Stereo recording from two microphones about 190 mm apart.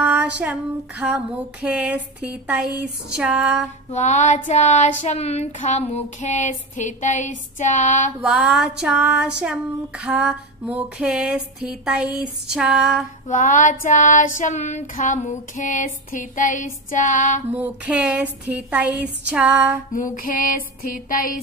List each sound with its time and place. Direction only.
0.0 s speech: 5° right (ahead or behind)
2.4 s a sound: 5° right (ahead or behind)
3.9 s child singing: 40° left (ahead or behind)
8.2 s a sound: 5° right (ahead or behind)
13.3 s child singing: 40° left (ahead or behind)
17.5 s speech: 10° right (ahead or behind)
19.9 s music: 45° left (ahead or behind)